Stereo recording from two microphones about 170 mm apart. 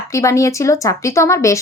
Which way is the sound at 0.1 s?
20° left (ahead or behind).